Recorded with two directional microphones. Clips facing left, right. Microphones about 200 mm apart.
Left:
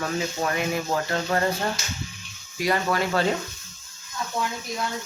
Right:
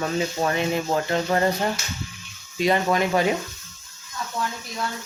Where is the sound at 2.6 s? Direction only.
20° right (ahead or behind).